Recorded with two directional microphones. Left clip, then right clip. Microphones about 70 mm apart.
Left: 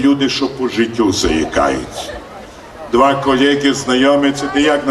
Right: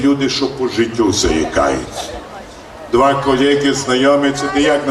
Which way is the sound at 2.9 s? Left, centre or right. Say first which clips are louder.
Left 1 dB; left.